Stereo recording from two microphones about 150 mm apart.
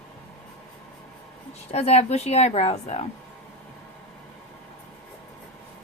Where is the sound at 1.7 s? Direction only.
45° left (ahead or behind).